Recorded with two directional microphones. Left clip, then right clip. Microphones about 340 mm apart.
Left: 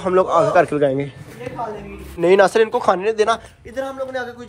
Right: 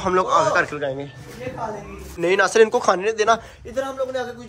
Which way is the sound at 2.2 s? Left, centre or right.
Centre.